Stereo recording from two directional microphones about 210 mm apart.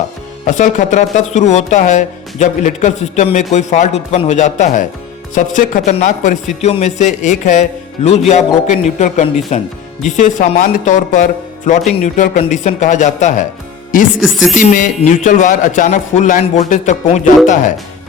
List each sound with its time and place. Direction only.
0.4 s speech: 35° left (ahead or behind)
14.2 s speech: centre (ahead or behind)
14.5 s speech: 40° left (ahead or behind)